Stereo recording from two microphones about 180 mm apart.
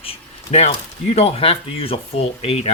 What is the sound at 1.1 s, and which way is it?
Speech, 35° left (ahead or behind).